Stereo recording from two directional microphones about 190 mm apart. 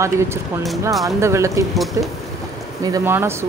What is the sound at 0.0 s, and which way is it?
Speech, 15° right (ahead or behind).